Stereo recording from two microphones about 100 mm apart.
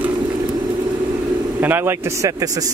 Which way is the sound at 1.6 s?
20° right (ahead or behind).